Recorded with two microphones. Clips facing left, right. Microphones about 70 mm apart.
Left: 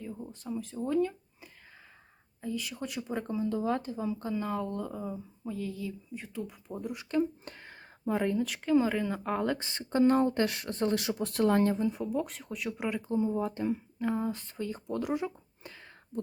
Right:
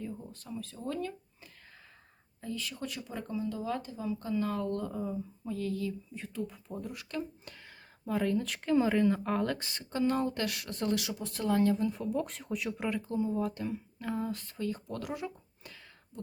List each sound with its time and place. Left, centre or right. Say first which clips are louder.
0.0 s a sound: even; centre
0.3 s speech: left 5 dB; centre
4.4 s speech: right 1 dB; centre
6.8 s speech: left 10 dB; left
7.4 s a sound: left 4 dB; left
8.3 s speech: left 3 dB; centre
9.6 s speech: left 6 dB; left
11.2 s speech: left 4 dB; left
11.8 s speech: left 2 dB; centre
12.0 s speech: left 1 dB; centre; by 16.2 s left